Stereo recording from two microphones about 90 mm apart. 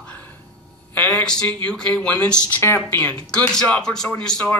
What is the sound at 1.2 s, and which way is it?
A man's voice, 15° left (ahead or behind).